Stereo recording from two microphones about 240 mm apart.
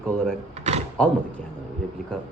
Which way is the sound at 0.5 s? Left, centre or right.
Right.